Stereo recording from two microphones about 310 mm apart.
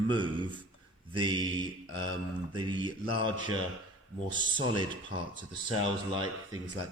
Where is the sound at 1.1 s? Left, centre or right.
Centre.